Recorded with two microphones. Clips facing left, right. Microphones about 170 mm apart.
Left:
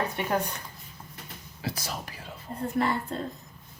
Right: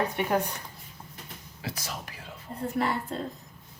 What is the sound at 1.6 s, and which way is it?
Speech, 35° left (ahead or behind).